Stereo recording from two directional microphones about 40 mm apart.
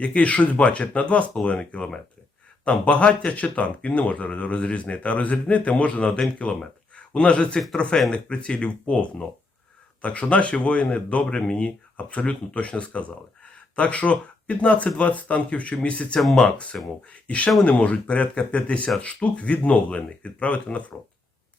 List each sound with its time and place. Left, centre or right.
0.0 s speech: left